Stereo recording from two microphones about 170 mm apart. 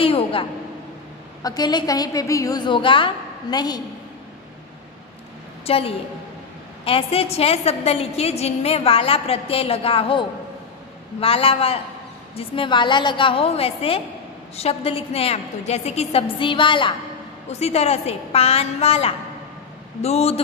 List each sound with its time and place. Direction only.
0.0 s a woman's voice: 30° left (ahead or behind)
5.7 s a woman's voice: 35° left (ahead or behind)